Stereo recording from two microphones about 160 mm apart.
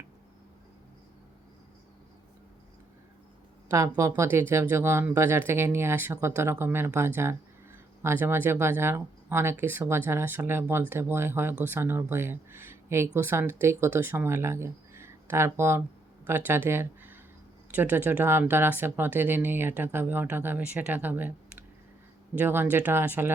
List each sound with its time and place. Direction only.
3.7 s speech: 20° right (ahead or behind)
22.4 s speech: 10° right (ahead or behind)